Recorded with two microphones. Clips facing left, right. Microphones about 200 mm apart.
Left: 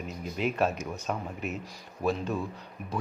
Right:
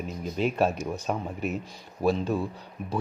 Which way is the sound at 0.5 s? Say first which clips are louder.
Right 3 dB; 30° right (ahead or behind).